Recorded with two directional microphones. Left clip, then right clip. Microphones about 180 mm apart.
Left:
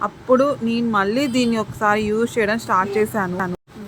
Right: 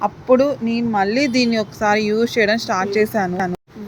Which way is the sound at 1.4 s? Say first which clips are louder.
Right 2 dB; 15° right (ahead or behind).